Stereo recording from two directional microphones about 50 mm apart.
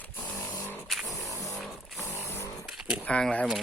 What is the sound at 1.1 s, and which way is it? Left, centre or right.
Vehicle, left.